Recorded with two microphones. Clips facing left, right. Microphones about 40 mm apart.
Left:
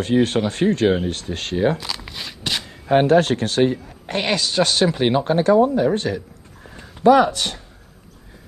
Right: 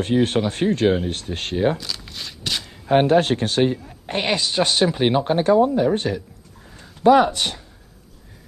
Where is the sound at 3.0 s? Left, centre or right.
Right.